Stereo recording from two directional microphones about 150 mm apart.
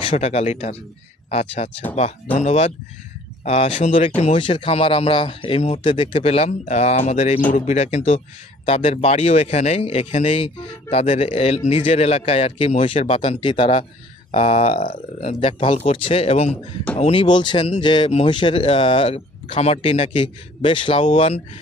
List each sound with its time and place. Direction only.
0.0 s speech: 40° left (ahead or behind)
4.4 s a man's voice: 35° left (ahead or behind)